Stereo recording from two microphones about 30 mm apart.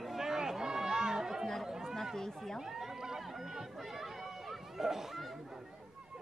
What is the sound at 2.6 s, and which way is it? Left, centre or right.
Run, centre.